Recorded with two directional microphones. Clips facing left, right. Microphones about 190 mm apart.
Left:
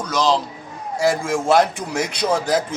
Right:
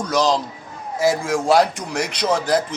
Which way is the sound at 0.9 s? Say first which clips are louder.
Even; centre (ahead or behind).